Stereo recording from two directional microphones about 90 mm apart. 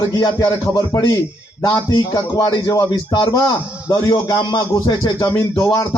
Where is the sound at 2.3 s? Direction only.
55° left (ahead or behind).